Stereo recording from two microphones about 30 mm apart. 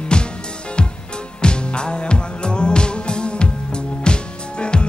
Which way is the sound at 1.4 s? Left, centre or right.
Left.